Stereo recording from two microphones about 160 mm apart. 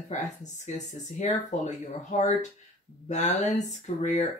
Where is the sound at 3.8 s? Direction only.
45° left (ahead or behind).